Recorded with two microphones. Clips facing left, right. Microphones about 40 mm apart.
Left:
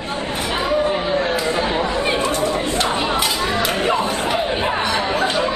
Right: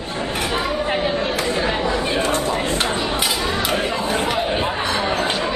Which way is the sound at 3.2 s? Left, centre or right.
Centre.